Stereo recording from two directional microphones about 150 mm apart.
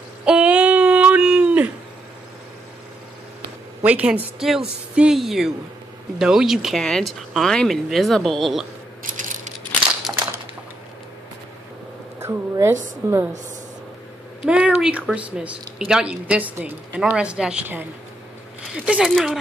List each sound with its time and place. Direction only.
0.2 s a sound: 5° right (ahead or behind)
3.8 s a woman's voice: 10° right (ahead or behind)
9.0 s coin: 60° right (ahead or behind)
12.2 s a sound: 20° right (ahead or behind)
13.0 s a woman's voice: 20° right (ahead or behind)
14.4 s a woman's voice: 5° right (ahead or behind)